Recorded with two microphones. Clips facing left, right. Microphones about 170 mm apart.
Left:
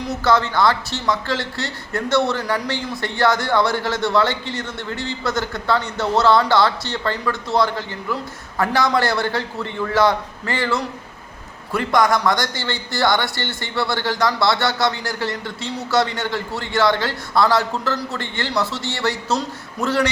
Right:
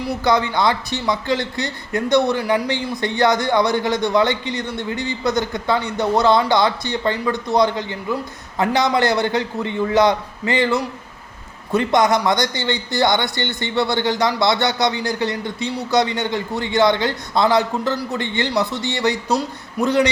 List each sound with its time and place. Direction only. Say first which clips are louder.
0.3 s a man's voice: left 1 dB; 15° right (ahead or behind)